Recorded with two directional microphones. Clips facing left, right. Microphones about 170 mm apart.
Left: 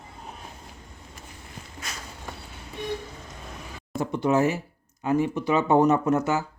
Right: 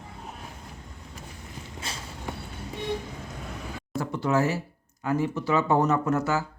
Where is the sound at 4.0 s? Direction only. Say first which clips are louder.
Left 3 dB; 20° left (ahead or behind).